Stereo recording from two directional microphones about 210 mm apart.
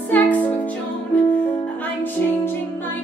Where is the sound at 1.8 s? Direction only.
10° left (ahead or behind).